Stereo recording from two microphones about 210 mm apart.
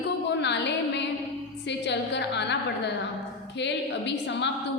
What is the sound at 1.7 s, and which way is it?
Speech, 55° left (ahead or behind).